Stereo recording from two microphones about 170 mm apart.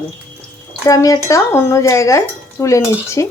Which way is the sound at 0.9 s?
20° left (ahead or behind).